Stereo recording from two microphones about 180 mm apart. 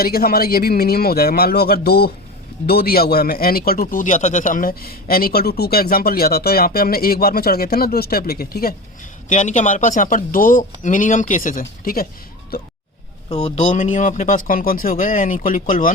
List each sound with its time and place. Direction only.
0.0 s speech: 55° left (ahead or behind)
9.3 s speech: 45° left (ahead or behind)
13.3 s speech: 40° left (ahead or behind)